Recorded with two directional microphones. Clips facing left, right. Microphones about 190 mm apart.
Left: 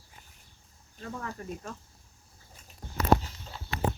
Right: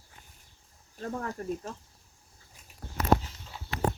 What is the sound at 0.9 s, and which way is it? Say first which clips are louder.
Speech: right 4 dB; 40° right (ahead or behind).